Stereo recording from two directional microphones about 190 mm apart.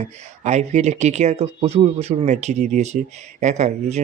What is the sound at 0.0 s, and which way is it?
Speech, 35° right (ahead or behind).